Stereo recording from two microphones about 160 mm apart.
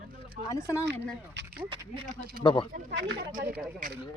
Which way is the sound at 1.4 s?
90° right.